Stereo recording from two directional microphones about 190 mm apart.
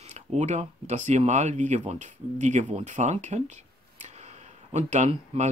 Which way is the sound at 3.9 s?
35° right (ahead or behind).